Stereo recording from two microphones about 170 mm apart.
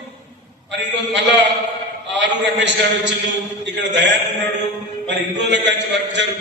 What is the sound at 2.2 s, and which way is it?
A man's voice, 90° right.